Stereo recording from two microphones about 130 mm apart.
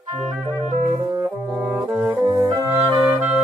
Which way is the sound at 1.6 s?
5° right (ahead or behind).